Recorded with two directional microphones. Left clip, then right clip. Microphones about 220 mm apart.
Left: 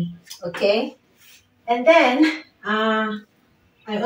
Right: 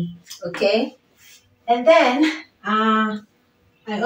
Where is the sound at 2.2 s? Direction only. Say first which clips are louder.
Left 1 dB; centre (ahead or behind).